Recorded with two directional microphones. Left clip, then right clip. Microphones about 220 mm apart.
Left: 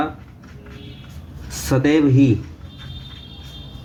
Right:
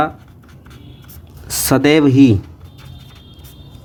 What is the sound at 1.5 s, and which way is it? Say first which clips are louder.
Speech: right 5 dB; 60° right (ahead or behind).